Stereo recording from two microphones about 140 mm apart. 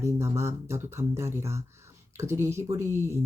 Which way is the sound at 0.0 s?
20° right (ahead or behind).